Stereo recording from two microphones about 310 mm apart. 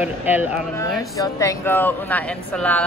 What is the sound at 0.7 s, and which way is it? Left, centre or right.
A woman's voice, centre.